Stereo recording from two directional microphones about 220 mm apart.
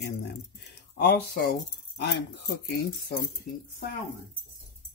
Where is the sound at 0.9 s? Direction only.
45° left (ahead or behind).